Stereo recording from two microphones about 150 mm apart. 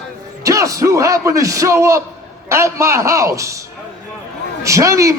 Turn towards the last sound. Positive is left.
turn(degrees=-20)  # may be behind; listen again after turning